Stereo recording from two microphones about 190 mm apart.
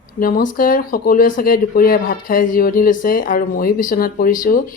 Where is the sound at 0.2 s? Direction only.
50° left (ahead or behind).